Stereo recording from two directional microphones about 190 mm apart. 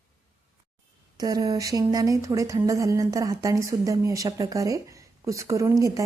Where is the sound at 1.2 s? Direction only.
20° right (ahead or behind).